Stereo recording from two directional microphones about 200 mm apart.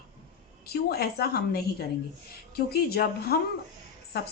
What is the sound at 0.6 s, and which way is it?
Speech, 50° left (ahead or behind).